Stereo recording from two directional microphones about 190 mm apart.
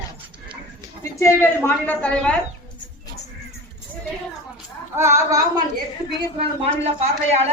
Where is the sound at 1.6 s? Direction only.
10° left (ahead or behind).